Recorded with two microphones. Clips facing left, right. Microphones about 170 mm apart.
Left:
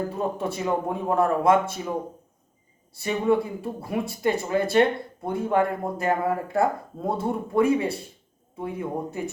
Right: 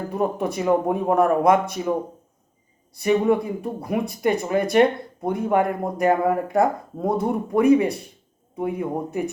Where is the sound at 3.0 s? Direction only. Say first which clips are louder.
Right 4 dB; 20° right (ahead or behind).